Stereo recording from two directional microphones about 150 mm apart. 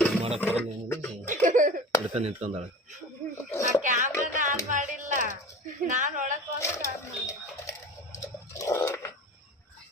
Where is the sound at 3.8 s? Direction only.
55° right (ahead or behind).